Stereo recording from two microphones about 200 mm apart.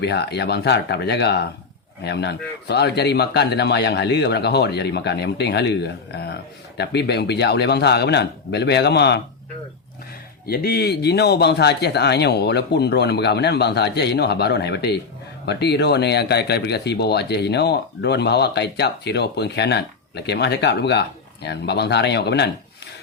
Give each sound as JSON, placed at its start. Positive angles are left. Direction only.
{"t": 0.0, "sound": "a man's voice", "side_deg": 55}
{"t": 10.4, "sound": "a man's voice", "side_deg": 50}